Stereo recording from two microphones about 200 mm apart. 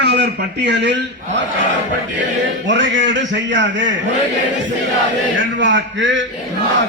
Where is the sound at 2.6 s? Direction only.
65° right (ahead or behind).